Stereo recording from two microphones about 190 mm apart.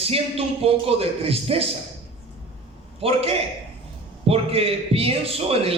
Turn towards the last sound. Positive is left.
turn(degrees=-30)  # may be behind; listen again after turning